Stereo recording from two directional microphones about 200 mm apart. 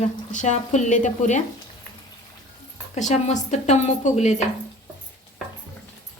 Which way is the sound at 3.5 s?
35° left (ahead or behind).